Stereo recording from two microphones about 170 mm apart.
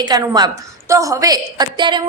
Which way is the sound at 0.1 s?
25° right (ahead or behind).